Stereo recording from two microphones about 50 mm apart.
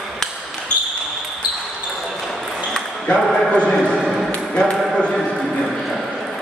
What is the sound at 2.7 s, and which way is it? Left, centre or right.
Ping, centre.